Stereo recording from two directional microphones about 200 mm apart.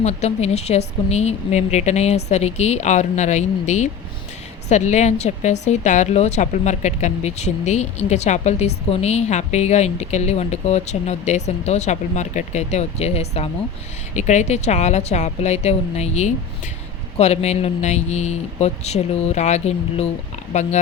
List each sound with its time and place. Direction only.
0.0 s a woman's voice: 35° left (ahead or behind)